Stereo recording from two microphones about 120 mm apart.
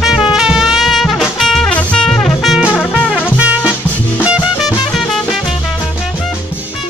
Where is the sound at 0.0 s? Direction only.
5° right (ahead or behind).